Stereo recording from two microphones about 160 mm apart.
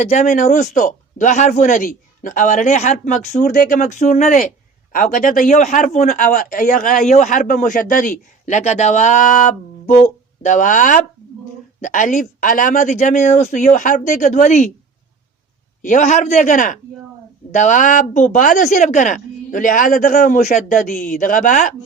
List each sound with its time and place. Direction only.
0.0 s speech: 45° left (ahead or behind)
3.3 s a man's voice: 60° left (ahead or behind)
15.8 s speech: 50° left (ahead or behind)